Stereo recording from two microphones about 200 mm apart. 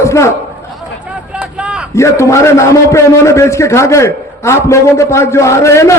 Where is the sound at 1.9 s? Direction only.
15° left (ahead or behind).